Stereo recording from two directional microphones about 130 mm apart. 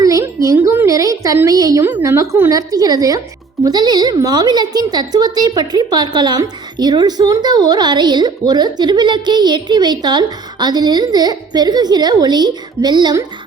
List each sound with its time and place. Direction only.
0.0 s music: 25° right (ahead or behind)
0.4 s a sound: 25° right (ahead or behind)
1.5 s a woman's voice: 25° right (ahead or behind)